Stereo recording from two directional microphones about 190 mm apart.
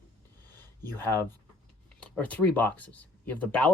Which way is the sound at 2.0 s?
5° left (ahead or behind).